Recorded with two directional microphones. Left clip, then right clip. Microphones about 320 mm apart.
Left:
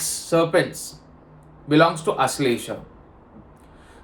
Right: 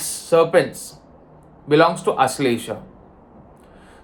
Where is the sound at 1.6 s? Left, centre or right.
Centre.